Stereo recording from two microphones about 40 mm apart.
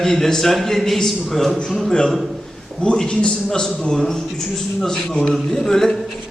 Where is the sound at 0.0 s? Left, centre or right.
Centre.